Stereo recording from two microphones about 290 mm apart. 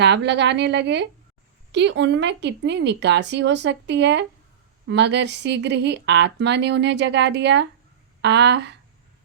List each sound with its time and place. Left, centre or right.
0.0 s speech: right